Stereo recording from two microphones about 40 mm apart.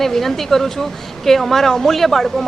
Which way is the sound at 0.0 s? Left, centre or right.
Centre.